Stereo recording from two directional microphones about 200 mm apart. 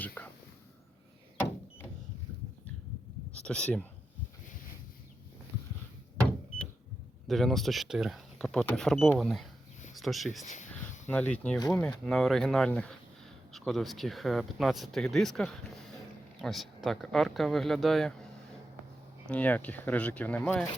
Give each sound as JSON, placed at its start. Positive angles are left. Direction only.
{"t": 0.0, "sound": "whispering", "side_deg": 10}
{"t": 3.3, "sound": "speech", "side_deg": 5}
{"t": 7.3, "sound": "speech", "side_deg": 0}
{"t": 10.4, "sound": "a sound", "side_deg": 35}
{"t": 11.0, "sound": "speech", "side_deg": 5}
{"t": 19.3, "sound": "speech", "side_deg": 10}